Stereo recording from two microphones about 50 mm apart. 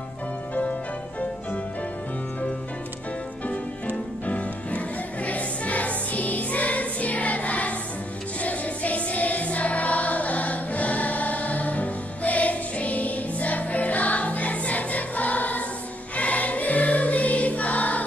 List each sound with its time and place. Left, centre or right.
3.4 s music: left